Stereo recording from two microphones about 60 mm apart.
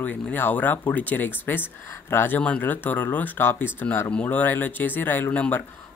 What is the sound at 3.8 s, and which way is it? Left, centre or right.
Speech, left.